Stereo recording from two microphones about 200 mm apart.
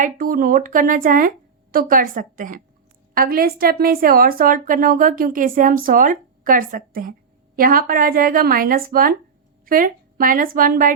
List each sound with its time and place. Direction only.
0.0 s a woman's voice: 45° right (ahead or behind)